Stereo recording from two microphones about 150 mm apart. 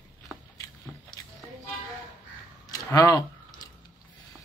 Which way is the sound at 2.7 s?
20° left (ahead or behind).